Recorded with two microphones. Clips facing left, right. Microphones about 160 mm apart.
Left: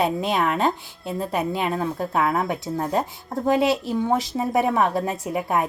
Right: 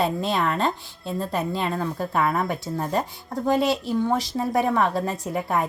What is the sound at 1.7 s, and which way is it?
A woman's voice, 20° left (ahead or behind).